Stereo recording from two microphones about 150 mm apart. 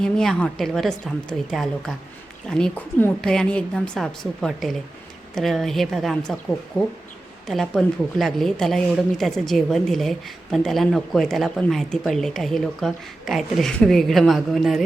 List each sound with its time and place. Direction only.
0.0 s a woman's voice: 5° left (ahead or behind)